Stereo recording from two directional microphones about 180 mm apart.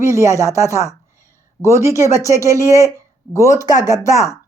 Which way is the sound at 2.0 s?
15° left (ahead or behind).